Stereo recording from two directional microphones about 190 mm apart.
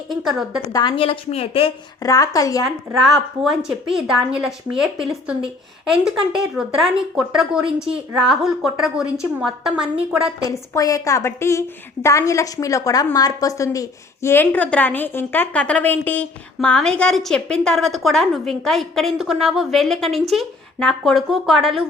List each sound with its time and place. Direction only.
0.1 s speech: centre (ahead or behind)
0.7 s a woman's voice: 25° left (ahead or behind)
2.6 s speech: centre (ahead or behind)
10.5 s a woman's voice: 20° left (ahead or behind); by 21.8 s centre (ahead or behind)